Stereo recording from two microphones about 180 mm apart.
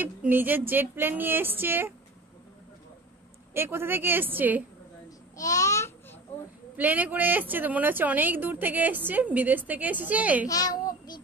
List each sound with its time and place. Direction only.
0.0 s speech: 10° right (ahead or behind)
3.5 s speech: 10° right (ahead or behind)
5.4 s babbling: 15° left (ahead or behind)
6.8 s speech: 10° right (ahead or behind)
10.5 s a sound: 20° left (ahead or behind)